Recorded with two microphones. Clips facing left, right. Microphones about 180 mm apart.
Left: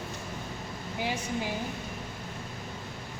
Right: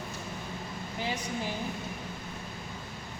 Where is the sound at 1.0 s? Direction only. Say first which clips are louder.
Left 2 dB; 10° left (ahead or behind).